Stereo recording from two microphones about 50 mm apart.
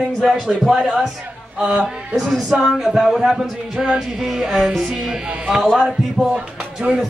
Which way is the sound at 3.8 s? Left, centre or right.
Centre.